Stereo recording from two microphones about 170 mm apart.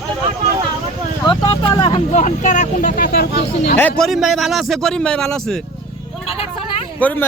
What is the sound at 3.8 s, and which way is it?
A man's voice, centre (ahead or behind).